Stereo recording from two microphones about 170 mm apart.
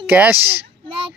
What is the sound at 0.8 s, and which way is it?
Child singing, 30° right (ahead or behind).